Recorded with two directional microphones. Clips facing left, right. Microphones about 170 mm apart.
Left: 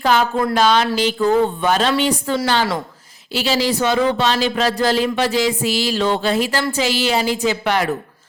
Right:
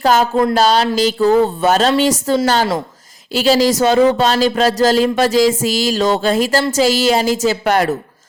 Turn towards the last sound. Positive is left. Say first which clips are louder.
# right 4 dB
turn(degrees=-45)  # may be behind; listen again after turning